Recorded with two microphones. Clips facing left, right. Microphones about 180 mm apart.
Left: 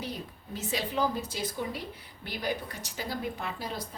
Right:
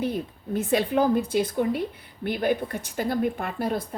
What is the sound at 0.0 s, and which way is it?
A woman's voice, 55° right (ahead or behind).